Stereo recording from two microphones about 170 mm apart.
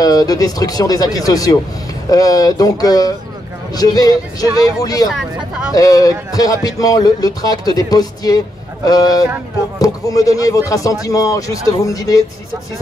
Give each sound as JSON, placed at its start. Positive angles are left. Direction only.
{"t": 0.0, "sound": "speech", "side_deg": 20}